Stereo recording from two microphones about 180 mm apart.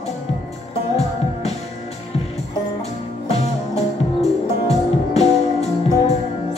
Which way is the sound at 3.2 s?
35° left (ahead or behind).